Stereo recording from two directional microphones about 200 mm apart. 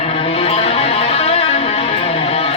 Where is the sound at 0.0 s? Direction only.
30° left (ahead or behind).